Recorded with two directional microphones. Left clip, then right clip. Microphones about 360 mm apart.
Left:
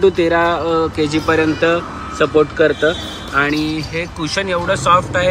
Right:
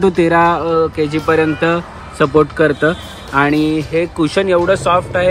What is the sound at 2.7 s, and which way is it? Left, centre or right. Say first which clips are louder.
Speech: right 1 dB; right.